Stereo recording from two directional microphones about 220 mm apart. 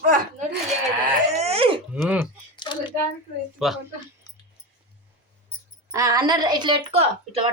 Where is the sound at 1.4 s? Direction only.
25° right (ahead or behind).